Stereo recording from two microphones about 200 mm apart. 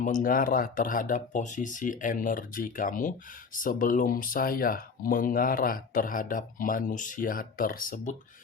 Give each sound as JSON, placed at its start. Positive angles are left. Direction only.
{"t": 0.0, "sound": "speech", "side_deg": 40}